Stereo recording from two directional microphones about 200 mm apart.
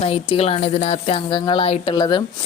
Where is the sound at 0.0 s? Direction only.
30° left (ahead or behind).